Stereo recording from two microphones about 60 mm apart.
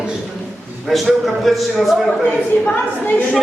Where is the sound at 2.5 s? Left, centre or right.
Left.